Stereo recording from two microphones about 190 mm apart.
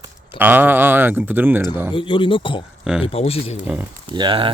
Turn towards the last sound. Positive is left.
turn(degrees=-25)  # may be behind; listen again after turning